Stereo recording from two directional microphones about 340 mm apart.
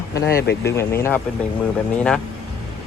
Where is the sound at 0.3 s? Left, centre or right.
Left.